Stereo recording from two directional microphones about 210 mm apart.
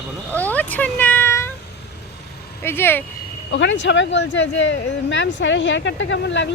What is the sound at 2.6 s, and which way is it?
Speech, 10° left (ahead or behind).